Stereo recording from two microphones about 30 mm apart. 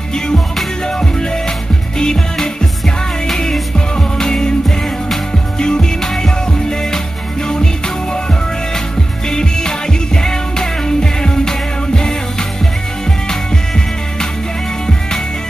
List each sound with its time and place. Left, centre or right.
0.8 s music: left
3.9 s music: left
5.6 s music: left
9.3 s music: left